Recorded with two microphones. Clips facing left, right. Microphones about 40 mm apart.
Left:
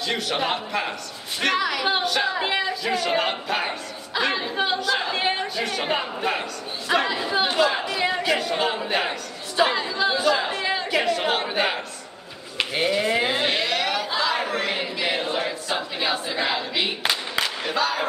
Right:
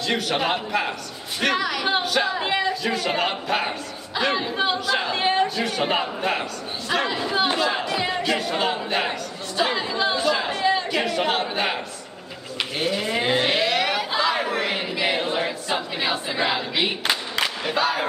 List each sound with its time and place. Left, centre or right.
0.0 s speech: centre
9.6 s a capella: centre
10.1 s chatter: centre
12.7 s speech: centre
13.2 s a sound: centre
17.6 s speech: centre